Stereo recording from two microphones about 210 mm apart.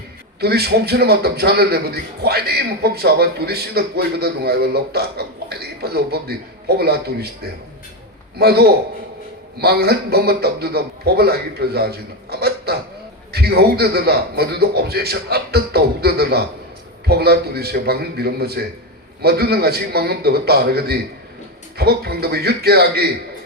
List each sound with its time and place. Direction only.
0.3 s a man's voice: 50° right (ahead or behind)